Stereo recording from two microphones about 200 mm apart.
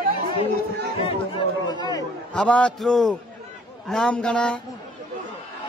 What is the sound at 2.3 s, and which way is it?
A man's voice, 5° left (ahead or behind).